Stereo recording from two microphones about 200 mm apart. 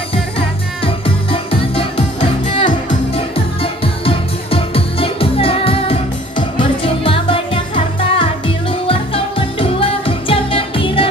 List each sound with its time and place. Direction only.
0.8 s music: 25° left (ahead or behind)